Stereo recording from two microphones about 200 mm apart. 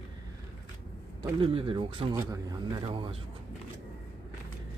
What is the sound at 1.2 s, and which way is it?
Speech, 25° right (ahead or behind).